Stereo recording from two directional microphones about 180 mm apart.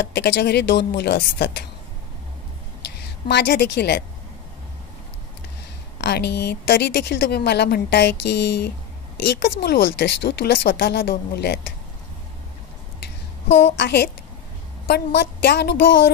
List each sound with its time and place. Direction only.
0.1 s a woman's voice: 65° left (ahead or behind)
3.3 s a woman's voice: 70° left (ahead or behind)
5.9 s a woman's voice: 65° left (ahead or behind)
13.7 s a woman's voice: 65° left (ahead or behind)